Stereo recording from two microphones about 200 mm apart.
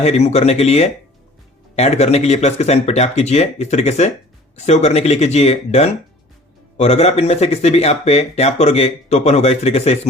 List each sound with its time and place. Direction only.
0.0 s speech: 35° left (ahead or behind)